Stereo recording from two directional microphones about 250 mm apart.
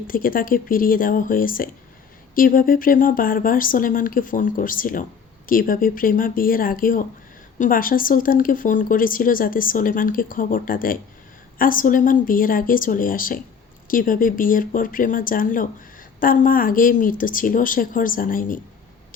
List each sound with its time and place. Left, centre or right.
0.1 s speech: left